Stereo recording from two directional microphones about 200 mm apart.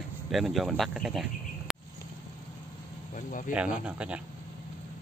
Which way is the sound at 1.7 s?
Centre (ahead or behind).